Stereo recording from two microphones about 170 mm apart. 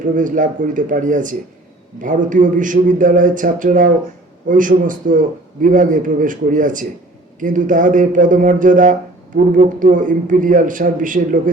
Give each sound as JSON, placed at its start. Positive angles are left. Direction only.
{"t": 0.0, "sound": "a man's voice", "side_deg": -50}